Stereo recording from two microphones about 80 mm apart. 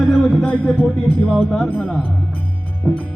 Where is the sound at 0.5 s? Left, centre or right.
Centre.